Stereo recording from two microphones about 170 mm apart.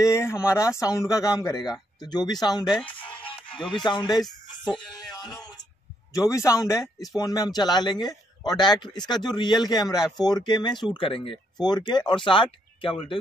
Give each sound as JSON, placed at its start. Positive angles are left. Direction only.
{"t": 0.0, "sound": "a man's voice", "side_deg": 15}
{"t": 3.3, "sound": "music", "side_deg": 30}
{"t": 3.7, "sound": "a man's voice", "side_deg": 25}
{"t": 4.9, "sound": "a sound", "side_deg": 25}
{"t": 6.1, "sound": "a man's voice", "side_deg": 20}